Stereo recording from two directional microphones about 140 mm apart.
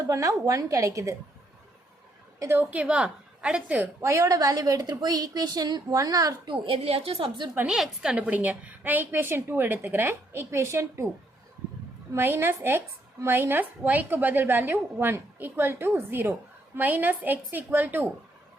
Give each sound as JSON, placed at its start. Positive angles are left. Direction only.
{"t": 0.1, "sound": "a woman's voice", "side_deg": -25}
{"t": 2.4, "sound": "a woman's voice", "side_deg": -15}
{"t": 6.7, "sound": "a woman's voice", "side_deg": -45}
{"t": 7.5, "sound": "a woman's voice", "side_deg": -15}
{"t": 12.1, "sound": "a woman's voice", "side_deg": -15}